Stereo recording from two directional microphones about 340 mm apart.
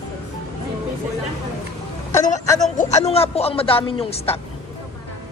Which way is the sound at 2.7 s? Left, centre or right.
Left.